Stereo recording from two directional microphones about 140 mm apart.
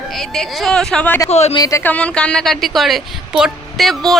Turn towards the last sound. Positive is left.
turn(degrees=0)  # may be behind; listen again after turning